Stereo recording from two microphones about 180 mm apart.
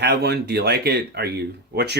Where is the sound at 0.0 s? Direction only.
65° right (ahead or behind).